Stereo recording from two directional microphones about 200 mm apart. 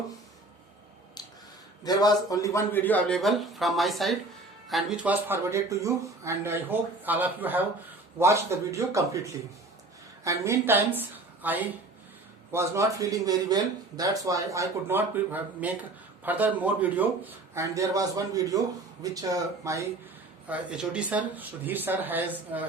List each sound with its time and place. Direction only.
1.8 s a man's voice: 20° left (ahead or behind); by 9.0 s 15° right (ahead or behind)
10.2 s speech: 15° right (ahead or behind)
20.5 s speech: 5° right (ahead or behind)